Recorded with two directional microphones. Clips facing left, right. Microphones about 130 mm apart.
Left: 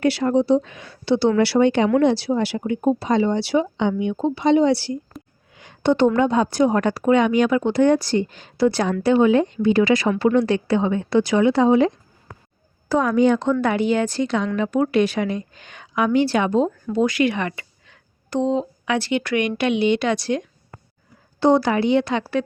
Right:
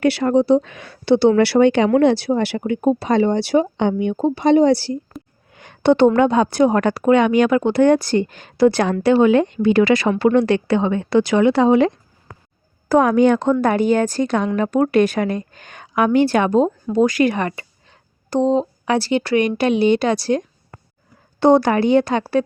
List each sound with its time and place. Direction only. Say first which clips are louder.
0.0 s speech: right 3 dB; 65° right (ahead or behind)
2.0 s a woman's voice: right 3 dB; 60° right (ahead or behind); by 4.9 s 40° right (ahead or behind)
5.5 s a sound: right 4 dB; 65° right (ahead or behind)
6.1 s speech: right 3 dB; 70° right (ahead or behind)
12.9 s speech: right 4 dB; 60° right (ahead or behind)
13.5 s a woman's voice: right 3 dB; 45° right (ahead or behind)
21.4 s a woman's voice: right 3 dB; 55° right (ahead or behind)